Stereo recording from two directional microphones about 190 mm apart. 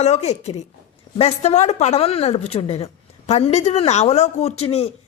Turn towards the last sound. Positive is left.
turn(degrees=30)  # may be behind; listen again after turning